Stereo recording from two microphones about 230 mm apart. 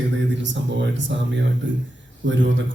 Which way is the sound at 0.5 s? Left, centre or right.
Right.